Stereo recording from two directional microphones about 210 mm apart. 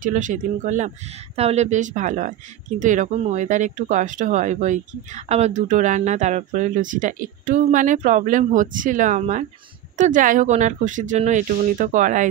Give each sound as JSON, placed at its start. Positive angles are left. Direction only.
{"t": 0.0, "sound": "speech", "side_deg": -35}